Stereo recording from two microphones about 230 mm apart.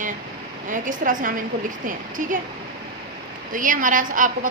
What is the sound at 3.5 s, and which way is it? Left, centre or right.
Speech, right.